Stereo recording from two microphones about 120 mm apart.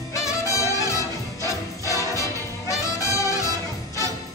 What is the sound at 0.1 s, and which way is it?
Music, 25° left (ahead or behind).